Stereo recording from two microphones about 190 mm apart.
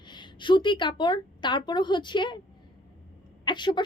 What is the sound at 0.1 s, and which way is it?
Speech, 25° left (ahead or behind).